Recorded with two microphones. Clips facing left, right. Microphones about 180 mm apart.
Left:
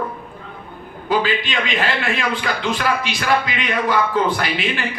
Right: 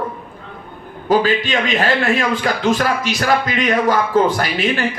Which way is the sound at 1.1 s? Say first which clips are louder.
Right 5 dB; 45° right (ahead or behind).